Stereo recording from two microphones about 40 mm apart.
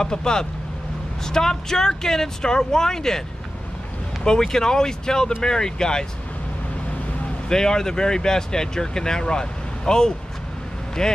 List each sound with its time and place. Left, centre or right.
0.0 s speech: centre
7.4 s speech: centre